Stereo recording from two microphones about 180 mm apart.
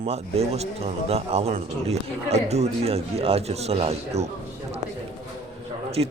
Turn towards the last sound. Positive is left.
turn(degrees=-30)  # may be behind; listen again after turning